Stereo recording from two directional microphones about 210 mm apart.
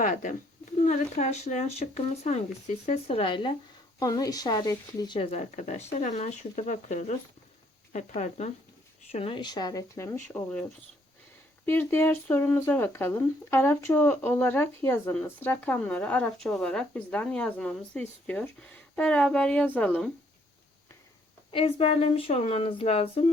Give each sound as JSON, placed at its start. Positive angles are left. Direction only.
{"t": 0.0, "sound": "speech", "side_deg": 40}
{"t": 21.5, "sound": "speech", "side_deg": 25}